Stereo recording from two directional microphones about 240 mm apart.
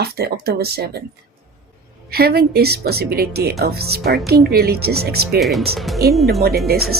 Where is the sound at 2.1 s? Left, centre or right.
Right.